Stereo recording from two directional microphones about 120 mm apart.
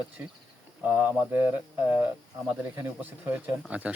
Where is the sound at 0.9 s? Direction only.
15° right (ahead or behind).